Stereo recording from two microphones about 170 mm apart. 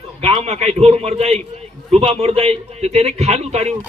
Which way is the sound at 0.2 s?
40° right (ahead or behind).